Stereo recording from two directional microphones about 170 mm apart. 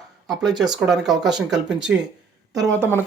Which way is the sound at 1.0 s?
Centre (ahead or behind).